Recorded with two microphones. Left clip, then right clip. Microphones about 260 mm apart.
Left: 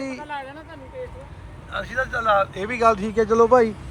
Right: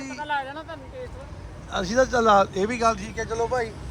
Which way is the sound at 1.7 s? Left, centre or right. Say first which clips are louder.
Right 4 dB; centre.